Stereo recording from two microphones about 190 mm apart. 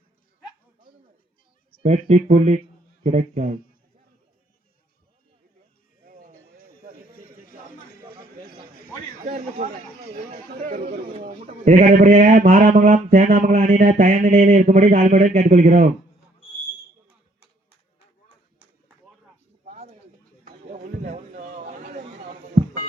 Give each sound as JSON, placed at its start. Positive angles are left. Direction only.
{"t": 1.8, "sound": "speech", "side_deg": -35}
{"t": 9.2, "sound": "a man's voice", "side_deg": -40}
{"t": 19.6, "sound": "a sound", "side_deg": -35}